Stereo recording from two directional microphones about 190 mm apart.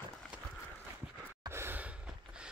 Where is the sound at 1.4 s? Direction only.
15° right (ahead or behind).